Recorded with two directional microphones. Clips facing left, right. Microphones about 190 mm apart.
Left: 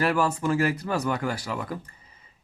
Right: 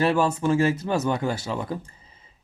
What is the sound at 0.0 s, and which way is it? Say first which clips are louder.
Speech: right 3 dB; 25° right (ahead or behind).